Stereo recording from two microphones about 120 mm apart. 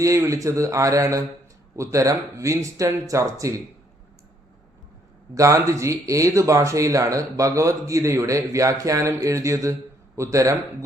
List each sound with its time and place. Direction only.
0.0 s speech: 25° right (ahead or behind)
5.3 s speech: 25° right (ahead or behind)